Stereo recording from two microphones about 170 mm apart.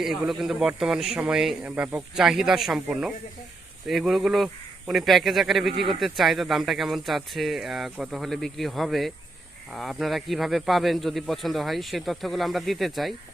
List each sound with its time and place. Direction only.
0.0 s speech: centre (ahead or behind)